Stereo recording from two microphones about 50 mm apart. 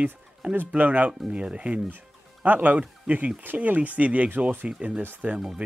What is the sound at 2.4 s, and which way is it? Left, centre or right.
Speech, right.